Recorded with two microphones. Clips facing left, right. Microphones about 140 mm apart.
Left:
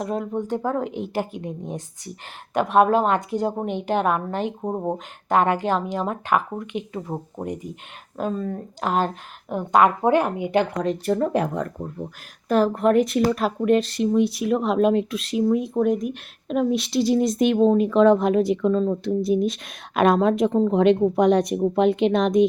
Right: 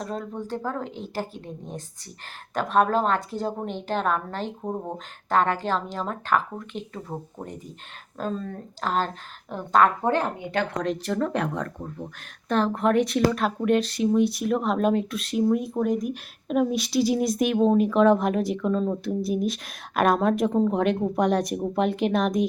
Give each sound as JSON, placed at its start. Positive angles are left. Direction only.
{"t": 0.0, "sound": "a woman's voice", "side_deg": 10}